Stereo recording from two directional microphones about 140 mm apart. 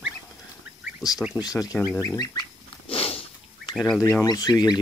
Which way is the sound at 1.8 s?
25° left (ahead or behind).